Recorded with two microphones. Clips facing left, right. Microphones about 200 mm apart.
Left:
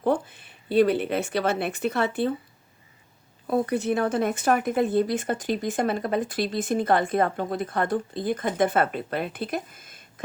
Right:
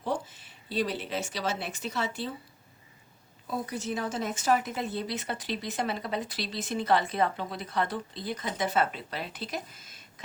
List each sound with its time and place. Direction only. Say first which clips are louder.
0.0 s speech: left 8 dB; 55° left (ahead or behind)
3.4 s speech: left 10 dB; 55° left (ahead or behind)